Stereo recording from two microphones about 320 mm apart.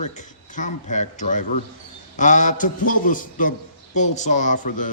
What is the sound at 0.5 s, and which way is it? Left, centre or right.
A man's voice, left.